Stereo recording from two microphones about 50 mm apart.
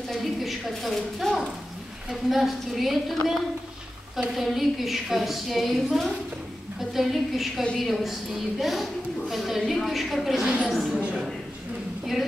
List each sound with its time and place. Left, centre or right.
0.1 s a woman's voice: centre
4.4 s a woman's voice: centre
11.0 s a man's voice: right